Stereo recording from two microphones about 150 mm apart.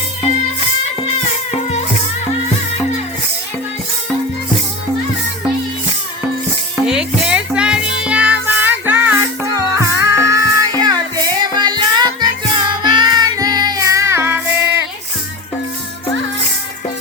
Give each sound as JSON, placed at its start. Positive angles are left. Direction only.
{"t": 1.5, "sound": "music", "side_deg": 45}
{"t": 6.8, "sound": "music", "side_deg": -5}